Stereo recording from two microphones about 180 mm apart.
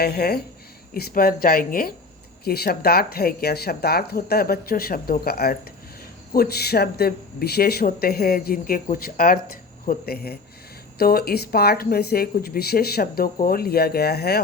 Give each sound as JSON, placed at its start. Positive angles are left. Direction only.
{"t": 0.0, "sound": "speech", "side_deg": 60}